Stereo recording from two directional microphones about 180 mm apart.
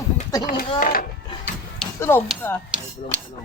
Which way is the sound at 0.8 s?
50° left (ahead or behind).